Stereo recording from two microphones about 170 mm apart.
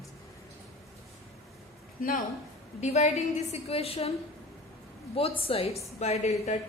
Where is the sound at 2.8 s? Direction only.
40° left (ahead or behind).